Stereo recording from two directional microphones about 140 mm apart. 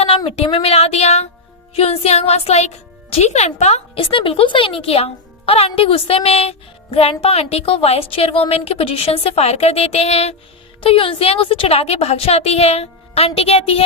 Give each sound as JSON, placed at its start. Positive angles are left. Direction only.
{"t": 0.3, "sound": "speech", "side_deg": 40}